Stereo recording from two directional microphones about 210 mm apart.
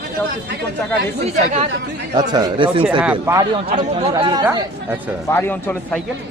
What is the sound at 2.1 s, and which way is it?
Speech, 20° right (ahead or behind).